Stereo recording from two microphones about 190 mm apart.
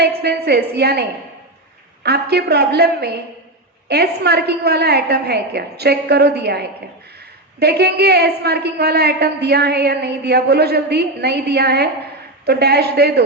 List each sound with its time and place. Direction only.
0.0 s a woman's voice: 55° right (ahead or behind)
2.0 s a woman's voice: 60° right (ahead or behind)